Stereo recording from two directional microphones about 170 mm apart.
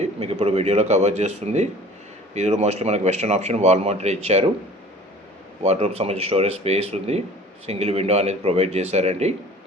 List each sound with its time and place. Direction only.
0.0 s speech: 40° right (ahead or behind)
5.6 s speech: 35° right (ahead or behind)